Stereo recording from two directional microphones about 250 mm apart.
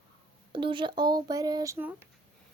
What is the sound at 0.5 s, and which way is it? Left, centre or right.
Speech, centre.